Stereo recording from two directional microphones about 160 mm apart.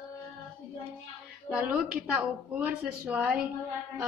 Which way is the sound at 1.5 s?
10° right (ahead or behind).